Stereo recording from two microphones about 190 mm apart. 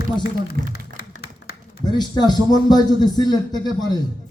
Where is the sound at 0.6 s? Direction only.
50° right (ahead or behind).